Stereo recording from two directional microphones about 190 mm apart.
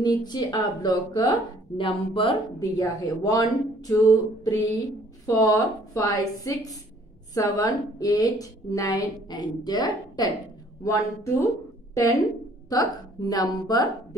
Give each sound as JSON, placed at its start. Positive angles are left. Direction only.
{"t": 0.0, "sound": "a woman's voice", "side_deg": 20}